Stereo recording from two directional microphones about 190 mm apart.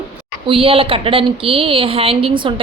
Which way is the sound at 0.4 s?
30° right (ahead or behind).